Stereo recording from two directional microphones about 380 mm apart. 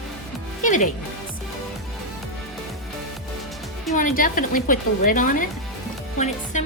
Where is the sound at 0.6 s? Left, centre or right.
Centre.